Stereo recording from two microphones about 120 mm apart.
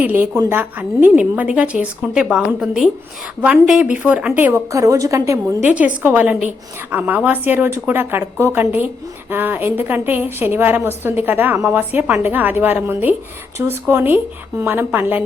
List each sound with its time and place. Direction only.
0.0 s a woman's voice: 15° right (ahead or behind)
4.7 s a woman's voice: 25° right (ahead or behind)
5.6 s a woman's voice: 10° right (ahead or behind)